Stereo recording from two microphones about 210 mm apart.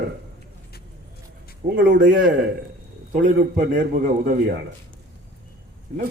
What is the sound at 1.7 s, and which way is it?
Speech, 45° right (ahead or behind).